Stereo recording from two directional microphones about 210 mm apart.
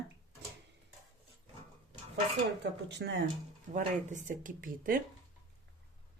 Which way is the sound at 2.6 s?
55° right (ahead or behind).